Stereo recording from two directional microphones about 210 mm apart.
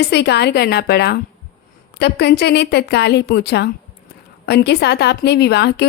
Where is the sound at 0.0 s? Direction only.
50° left (ahead or behind).